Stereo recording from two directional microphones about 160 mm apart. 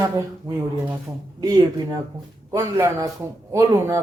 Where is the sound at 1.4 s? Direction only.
25° right (ahead or behind).